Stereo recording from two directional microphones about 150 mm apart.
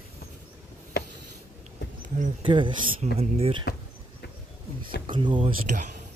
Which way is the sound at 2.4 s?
35° right (ahead or behind).